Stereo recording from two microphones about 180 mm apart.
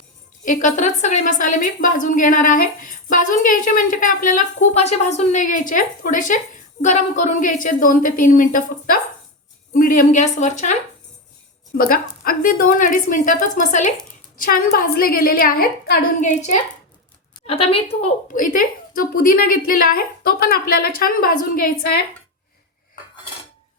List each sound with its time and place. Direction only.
0.4 s a woman's voice: 45° left (ahead or behind)
11.9 s a woman's voice: 50° left (ahead or behind)
16.2 s a woman's voice: 40° left (ahead or behind)
18.3 s a woman's voice: 50° left (ahead or behind)